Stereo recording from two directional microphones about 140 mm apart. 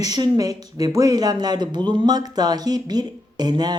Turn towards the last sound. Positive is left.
turn(degrees=-30)  # may be behind; listen again after turning